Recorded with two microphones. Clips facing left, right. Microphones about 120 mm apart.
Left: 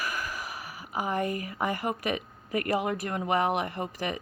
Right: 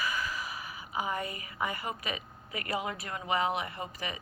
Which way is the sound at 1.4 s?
50° left (ahead or behind).